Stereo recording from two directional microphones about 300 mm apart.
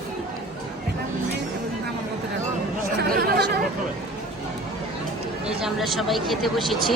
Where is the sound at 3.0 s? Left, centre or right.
Right.